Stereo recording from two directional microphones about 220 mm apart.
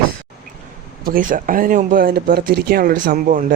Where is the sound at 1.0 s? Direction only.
40° right (ahead or behind).